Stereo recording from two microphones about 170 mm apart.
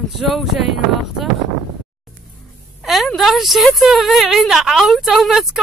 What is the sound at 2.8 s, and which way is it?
A woman's voice, centre (ahead or behind).